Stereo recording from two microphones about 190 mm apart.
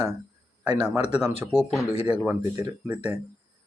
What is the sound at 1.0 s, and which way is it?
Speech, 35° left (ahead or behind).